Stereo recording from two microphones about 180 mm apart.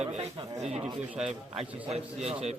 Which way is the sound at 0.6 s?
35° right (ahead or behind).